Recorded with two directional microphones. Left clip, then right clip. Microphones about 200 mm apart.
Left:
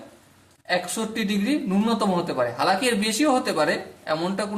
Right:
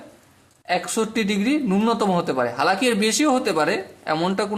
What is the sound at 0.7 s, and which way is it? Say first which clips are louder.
Speech: right 3 dB; 45° right (ahead or behind).